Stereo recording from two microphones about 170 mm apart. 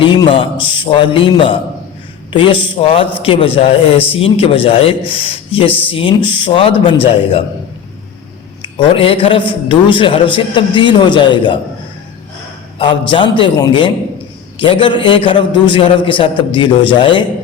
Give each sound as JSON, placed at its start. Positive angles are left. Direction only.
{"t": 0.0, "sound": "a man's voice", "side_deg": 30}
{"t": 8.8, "sound": "a man's voice", "side_deg": 30}
{"t": 12.8, "sound": "a man's voice", "side_deg": 30}